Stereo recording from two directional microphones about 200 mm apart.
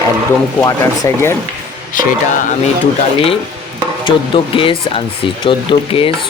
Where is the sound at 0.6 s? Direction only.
15° left (ahead or behind).